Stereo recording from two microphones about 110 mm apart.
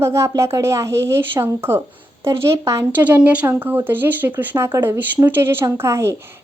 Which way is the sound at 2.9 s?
15° right (ahead or behind).